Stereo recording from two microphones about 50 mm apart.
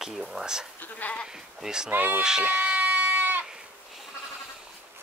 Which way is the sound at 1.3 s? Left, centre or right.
Centre.